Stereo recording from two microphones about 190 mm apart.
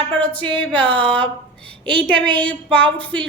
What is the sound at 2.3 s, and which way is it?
Speech, 10° left (ahead or behind).